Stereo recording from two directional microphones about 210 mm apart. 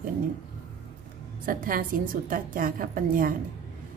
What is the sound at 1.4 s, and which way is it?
A woman's voice, 40° right (ahead or behind).